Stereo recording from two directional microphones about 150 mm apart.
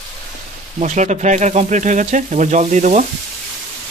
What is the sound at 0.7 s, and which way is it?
Speech, 55° right (ahead or behind).